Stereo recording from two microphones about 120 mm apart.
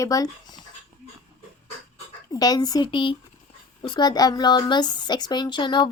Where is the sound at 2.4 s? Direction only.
30° left (ahead or behind).